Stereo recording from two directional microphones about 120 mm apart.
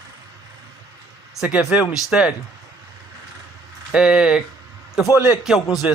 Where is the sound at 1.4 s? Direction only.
5° right (ahead or behind).